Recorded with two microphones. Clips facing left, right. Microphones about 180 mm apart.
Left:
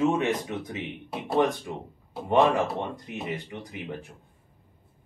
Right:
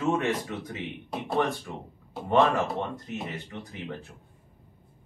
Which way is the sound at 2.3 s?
15° left (ahead or behind).